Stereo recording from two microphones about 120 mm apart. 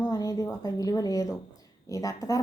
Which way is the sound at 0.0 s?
30° left (ahead or behind).